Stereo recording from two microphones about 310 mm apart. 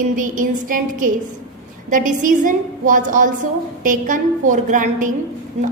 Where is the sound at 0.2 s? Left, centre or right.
Right.